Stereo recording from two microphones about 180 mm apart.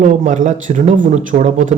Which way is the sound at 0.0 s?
40° right (ahead or behind).